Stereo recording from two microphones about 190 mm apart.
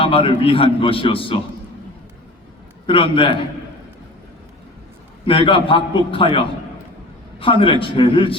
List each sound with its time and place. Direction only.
0.0 s a man's voice: 30° left (ahead or behind)
2.8 s a man's voice: 25° left (ahead or behind)
5.2 s a man's voice: 25° left (ahead or behind)